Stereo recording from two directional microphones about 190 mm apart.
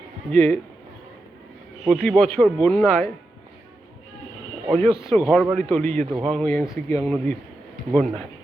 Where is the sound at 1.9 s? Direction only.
Centre (ahead or behind).